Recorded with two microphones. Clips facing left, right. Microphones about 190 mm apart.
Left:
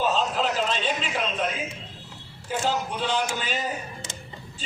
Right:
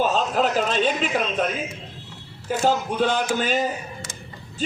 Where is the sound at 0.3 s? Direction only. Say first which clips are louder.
Right 5 dB; 50° right (ahead or behind).